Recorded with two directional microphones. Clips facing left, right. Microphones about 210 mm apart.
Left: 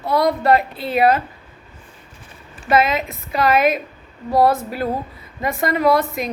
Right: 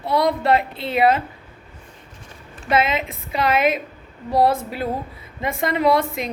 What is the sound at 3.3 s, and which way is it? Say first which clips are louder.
A woman's voice: left 2 dB; 20° right (ahead or behind).